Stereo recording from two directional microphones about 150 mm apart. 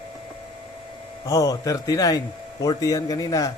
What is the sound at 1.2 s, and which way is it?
A man's voice, 25° left (ahead or behind).